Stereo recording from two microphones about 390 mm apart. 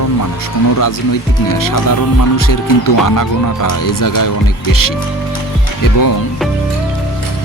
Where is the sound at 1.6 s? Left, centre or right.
Left.